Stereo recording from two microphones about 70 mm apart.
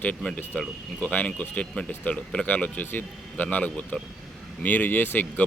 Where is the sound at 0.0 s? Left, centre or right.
Centre.